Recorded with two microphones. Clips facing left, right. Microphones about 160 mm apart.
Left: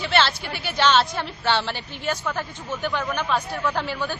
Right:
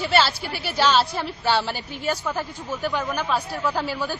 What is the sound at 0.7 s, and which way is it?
A woman's voice, 5° right (ahead or behind).